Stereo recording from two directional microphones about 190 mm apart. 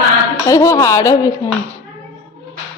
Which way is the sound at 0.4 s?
15° left (ahead or behind).